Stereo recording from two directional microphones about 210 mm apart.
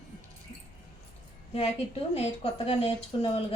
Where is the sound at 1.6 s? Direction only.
30° left (ahead or behind).